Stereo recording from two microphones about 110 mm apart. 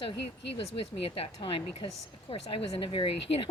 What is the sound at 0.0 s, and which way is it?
A woman's voice, 55° left (ahead or behind).